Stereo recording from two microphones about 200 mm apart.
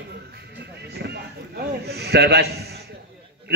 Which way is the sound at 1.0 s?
55° right (ahead or behind).